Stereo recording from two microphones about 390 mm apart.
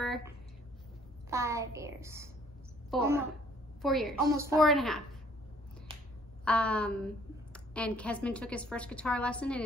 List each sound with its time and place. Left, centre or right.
0.0 s a sound: centre
1.3 s a woman's voice: centre
6.4 s a woman's voice: centre